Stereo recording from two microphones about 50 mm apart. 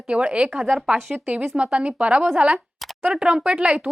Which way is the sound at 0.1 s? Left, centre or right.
Right.